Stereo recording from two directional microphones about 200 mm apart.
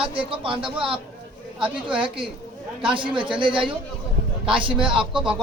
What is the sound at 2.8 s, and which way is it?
A man's voice, 25° right (ahead or behind).